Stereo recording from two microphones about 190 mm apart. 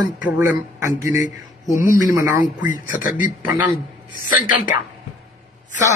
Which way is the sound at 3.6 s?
45° left (ahead or behind).